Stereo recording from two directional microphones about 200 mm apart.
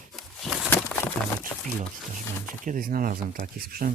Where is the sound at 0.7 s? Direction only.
10° left (ahead or behind).